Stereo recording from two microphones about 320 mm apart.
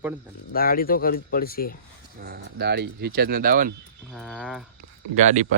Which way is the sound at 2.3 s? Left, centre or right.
Right.